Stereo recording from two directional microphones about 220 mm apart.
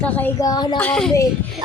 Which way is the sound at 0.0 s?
5° left (ahead or behind).